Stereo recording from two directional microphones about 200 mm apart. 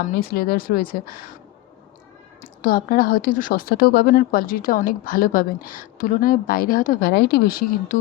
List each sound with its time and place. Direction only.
0.2 s a woman's voice: 50° left (ahead or behind)
2.4 s a woman's voice: 45° left (ahead or behind)